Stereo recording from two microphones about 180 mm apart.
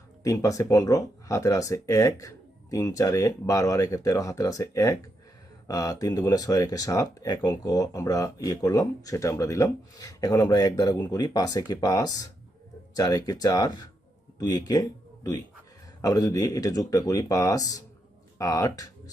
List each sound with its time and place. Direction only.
0.2 s speech: 20° left (ahead or behind)